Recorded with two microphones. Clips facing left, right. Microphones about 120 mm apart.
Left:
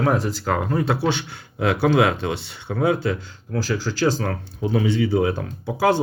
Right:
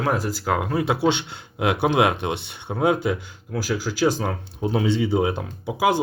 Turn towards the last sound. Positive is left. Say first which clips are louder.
# left 1 dB
turn(degrees=-15)  # may be behind; listen again after turning